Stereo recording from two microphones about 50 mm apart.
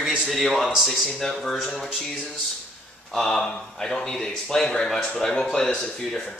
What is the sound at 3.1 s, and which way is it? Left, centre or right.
Speech, centre.